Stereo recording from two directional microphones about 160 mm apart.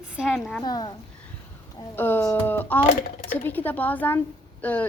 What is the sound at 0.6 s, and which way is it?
Speech, 25° left (ahead or behind).